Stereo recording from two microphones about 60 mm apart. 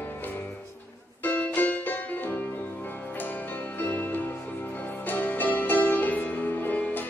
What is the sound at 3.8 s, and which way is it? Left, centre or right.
Music, left.